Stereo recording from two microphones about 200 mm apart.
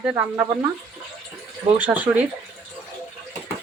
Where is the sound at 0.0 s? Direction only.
10° right (ahead or behind).